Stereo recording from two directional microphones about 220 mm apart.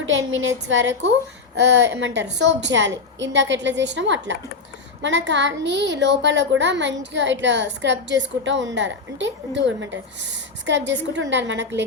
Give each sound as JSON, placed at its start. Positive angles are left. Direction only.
{"t": 0.1, "sound": "a woman's voice", "side_deg": -60}